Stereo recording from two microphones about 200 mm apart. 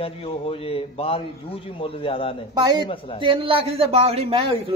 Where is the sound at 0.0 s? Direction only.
30° left (ahead or behind).